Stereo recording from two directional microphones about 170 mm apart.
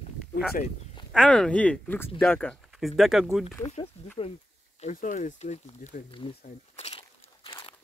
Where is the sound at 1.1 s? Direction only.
5° left (ahead or behind).